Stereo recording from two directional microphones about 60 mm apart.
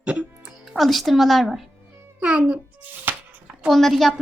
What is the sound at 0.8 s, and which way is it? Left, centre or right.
Speech, centre.